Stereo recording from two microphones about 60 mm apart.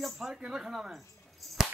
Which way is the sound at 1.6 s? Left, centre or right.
Centre.